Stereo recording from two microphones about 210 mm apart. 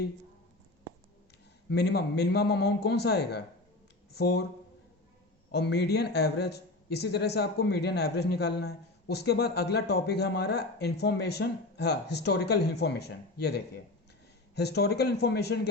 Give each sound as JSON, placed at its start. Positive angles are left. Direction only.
{"t": 1.7, "sound": "a man's voice", "side_deg": 50}
{"t": 5.5, "sound": "a man's voice", "side_deg": 50}